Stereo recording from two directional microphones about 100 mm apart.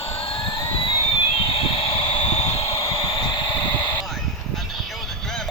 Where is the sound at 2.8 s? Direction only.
30° left (ahead or behind).